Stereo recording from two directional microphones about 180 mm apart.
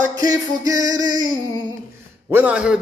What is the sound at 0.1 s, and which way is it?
Music, 20° right (ahead or behind).